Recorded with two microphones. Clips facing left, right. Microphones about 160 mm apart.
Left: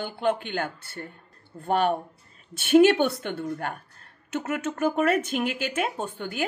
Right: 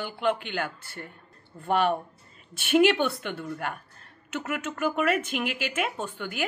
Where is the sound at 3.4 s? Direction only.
40° left (ahead or behind).